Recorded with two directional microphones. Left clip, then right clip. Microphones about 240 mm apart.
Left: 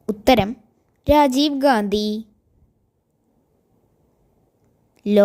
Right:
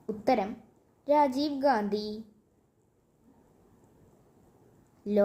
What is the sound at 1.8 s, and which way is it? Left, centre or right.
Speech, left.